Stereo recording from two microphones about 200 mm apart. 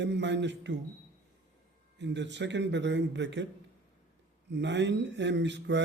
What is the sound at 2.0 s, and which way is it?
Speech, 60° right (ahead or behind).